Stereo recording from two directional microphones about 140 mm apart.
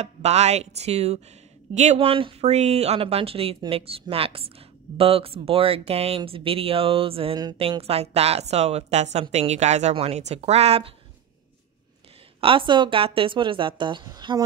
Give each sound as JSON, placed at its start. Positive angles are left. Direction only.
{"t": 0.0, "sound": "speech", "side_deg": -50}
{"t": 12.4, "sound": "speech", "side_deg": -40}